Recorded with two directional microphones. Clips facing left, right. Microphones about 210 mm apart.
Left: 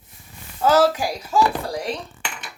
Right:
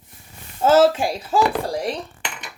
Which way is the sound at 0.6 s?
25° right (ahead or behind).